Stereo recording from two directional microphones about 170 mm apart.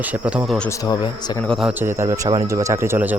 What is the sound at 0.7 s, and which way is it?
Speech, 20° left (ahead or behind).